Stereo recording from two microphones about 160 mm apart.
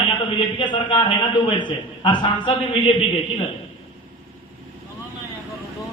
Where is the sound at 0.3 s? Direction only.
30° left (ahead or behind).